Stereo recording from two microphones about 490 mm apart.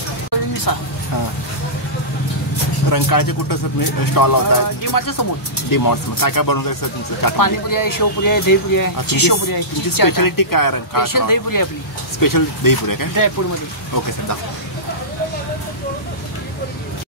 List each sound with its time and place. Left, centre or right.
0.7 s speech: left
2.9 s speech: left